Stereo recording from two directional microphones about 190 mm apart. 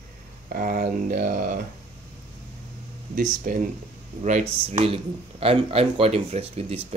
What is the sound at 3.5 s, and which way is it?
Speech, 45° right (ahead or behind).